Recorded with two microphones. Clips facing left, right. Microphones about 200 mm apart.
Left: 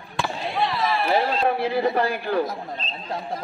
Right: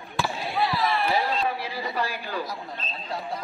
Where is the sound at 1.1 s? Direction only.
55° left (ahead or behind).